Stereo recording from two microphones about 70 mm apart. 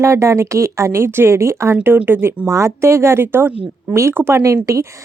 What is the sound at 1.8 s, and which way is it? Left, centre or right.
A woman's voice, right.